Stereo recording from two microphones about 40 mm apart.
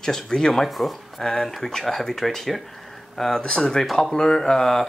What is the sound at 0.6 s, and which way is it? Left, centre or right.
Speech, centre.